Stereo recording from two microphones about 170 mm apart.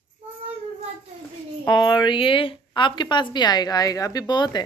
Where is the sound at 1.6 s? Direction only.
25° left (ahead or behind).